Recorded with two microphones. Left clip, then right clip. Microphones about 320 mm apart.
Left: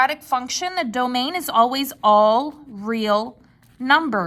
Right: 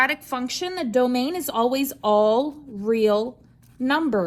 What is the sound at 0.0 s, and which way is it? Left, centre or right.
Speech, centre.